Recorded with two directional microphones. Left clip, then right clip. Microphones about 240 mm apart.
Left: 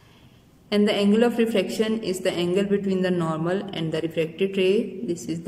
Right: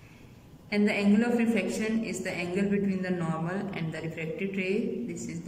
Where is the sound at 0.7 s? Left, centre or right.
Left.